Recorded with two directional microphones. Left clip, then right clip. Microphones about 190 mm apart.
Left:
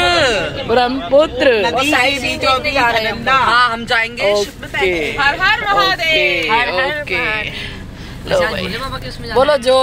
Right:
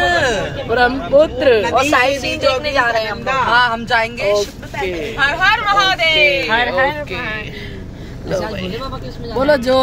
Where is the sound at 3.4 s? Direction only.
15° right (ahead or behind).